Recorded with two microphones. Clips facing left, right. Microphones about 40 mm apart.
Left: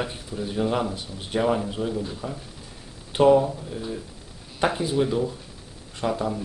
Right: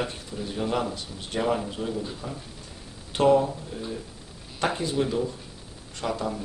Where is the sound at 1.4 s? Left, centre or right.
Centre.